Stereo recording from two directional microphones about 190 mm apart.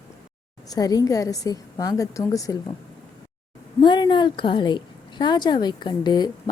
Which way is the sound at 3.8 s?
25° left (ahead or behind).